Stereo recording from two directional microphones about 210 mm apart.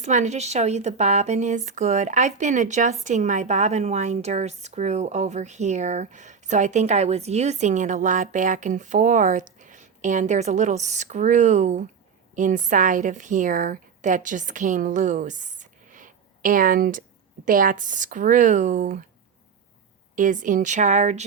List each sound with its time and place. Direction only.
0.0 s a woman's voice: 35° right (ahead or behind)
20.1 s speech: 35° right (ahead or behind)